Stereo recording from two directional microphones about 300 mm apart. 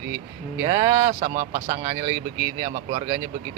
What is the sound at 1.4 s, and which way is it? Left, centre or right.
Speech, right.